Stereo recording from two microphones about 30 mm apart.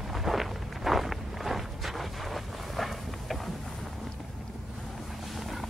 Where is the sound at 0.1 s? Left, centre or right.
Centre.